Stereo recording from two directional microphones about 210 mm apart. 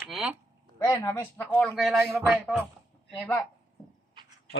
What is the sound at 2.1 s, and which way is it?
Music, 5° right (ahead or behind).